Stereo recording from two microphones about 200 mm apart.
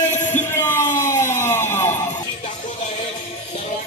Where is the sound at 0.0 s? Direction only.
35° left (ahead or behind).